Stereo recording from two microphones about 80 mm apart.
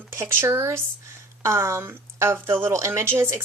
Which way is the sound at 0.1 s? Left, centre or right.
Right.